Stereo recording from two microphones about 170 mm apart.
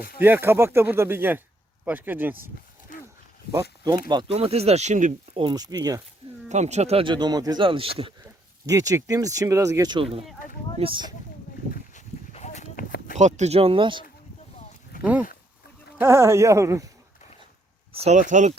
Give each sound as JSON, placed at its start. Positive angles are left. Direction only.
{"t": 0.2, "sound": "speech", "side_deg": -10}
{"t": 2.9, "sound": "a sound", "side_deg": 50}
{"t": 3.5, "sound": "speech", "side_deg": -15}
{"t": 4.1, "sound": "speech", "side_deg": -30}
{"t": 5.3, "sound": "speech", "side_deg": -30}
{"t": 6.5, "sound": "speech", "side_deg": -40}
{"t": 8.6, "sound": "speech", "side_deg": -20}
{"t": 11.9, "sound": "dog", "side_deg": 40}
{"t": 13.1, "sound": "speech", "side_deg": -45}
{"t": 15.0, "sound": "speech", "side_deg": -10}
{"t": 18.0, "sound": "speech", "side_deg": -45}